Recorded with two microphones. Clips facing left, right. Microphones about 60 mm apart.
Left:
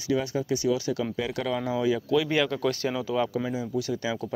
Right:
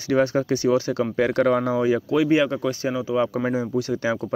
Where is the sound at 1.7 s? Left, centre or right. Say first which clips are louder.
Right 4 dB; right; by 3.3 s centre.